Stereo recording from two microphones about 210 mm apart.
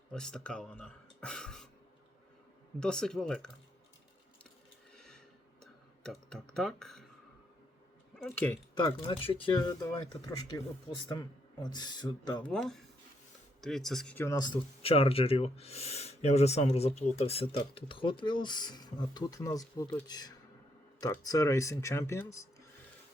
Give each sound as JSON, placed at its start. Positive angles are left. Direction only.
{"t": 0.1, "sound": "speech", "side_deg": 5}
{"t": 2.8, "sound": "speech", "side_deg": 5}
{"t": 4.9, "sound": "a sound", "side_deg": 5}
{"t": 6.0, "sound": "speech", "side_deg": 5}
{"t": 8.1, "sound": "speech", "side_deg": 5}
{"t": 9.0, "sound": "speech", "side_deg": 25}
{"t": 11.6, "sound": "speech", "side_deg": 20}
{"t": 12.5, "sound": "speech", "side_deg": 5}